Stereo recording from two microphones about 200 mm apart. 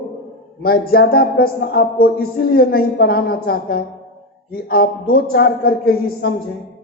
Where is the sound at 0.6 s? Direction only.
50° left (ahead or behind).